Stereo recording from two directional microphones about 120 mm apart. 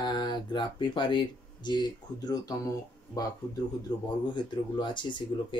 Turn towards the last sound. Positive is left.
turn(degrees=40)  # may be behind; listen again after turning